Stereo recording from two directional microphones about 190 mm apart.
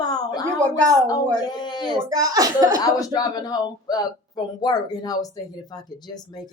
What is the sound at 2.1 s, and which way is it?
Speech, 20° right (ahead or behind).